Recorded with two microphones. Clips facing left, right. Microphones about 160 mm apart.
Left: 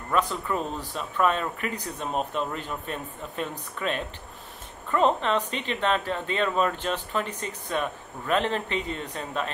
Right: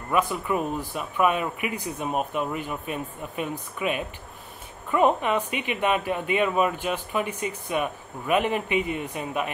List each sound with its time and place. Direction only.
0.1 s speech: 10° right (ahead or behind)